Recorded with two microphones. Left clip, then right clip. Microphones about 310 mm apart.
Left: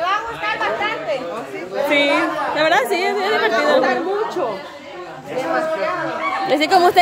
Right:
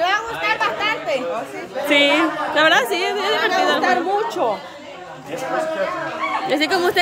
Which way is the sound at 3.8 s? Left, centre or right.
Right.